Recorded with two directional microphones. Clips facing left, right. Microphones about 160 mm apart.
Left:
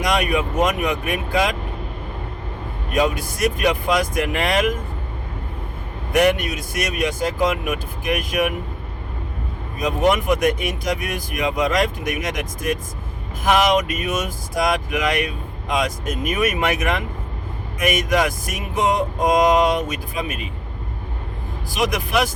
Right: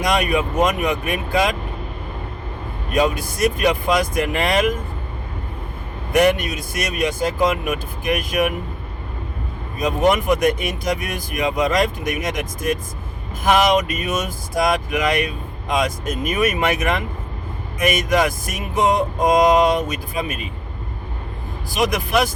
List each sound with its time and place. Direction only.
0.0 s speech: 35° right (ahead or behind)
2.9 s speech: 35° right (ahead or behind)
6.1 s speech: 35° right (ahead or behind)
9.7 s speech: 35° right (ahead or behind)